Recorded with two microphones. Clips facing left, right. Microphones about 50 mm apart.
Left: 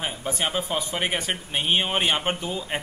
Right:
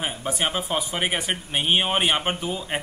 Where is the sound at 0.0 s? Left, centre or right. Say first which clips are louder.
Right 1 dB; centre.